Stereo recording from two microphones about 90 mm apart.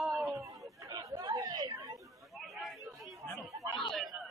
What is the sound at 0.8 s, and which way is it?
Chatter, 40° right (ahead or behind).